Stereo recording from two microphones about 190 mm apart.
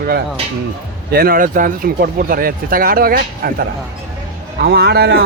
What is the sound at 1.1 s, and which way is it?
A man's voice, 50° right (ahead or behind).